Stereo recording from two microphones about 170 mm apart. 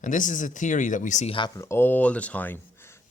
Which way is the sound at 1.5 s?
15° left (ahead or behind).